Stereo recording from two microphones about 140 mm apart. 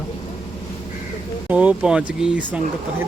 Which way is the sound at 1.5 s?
10° right (ahead or behind).